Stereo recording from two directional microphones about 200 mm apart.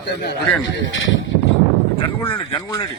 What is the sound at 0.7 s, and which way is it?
Speech, 75° left (ahead or behind).